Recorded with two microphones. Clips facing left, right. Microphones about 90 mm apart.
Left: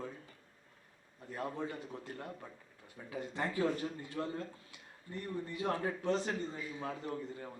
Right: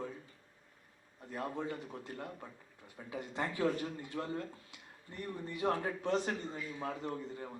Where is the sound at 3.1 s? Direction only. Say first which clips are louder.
Left 1 dB; 20° right (ahead or behind).